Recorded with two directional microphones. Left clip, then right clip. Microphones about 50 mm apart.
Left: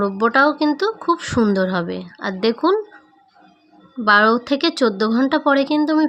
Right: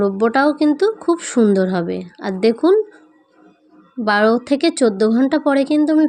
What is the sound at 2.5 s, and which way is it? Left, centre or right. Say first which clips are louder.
Speech: right 3 dB; right.